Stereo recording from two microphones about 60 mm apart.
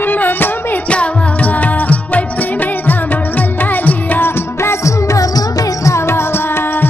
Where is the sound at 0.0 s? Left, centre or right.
Left.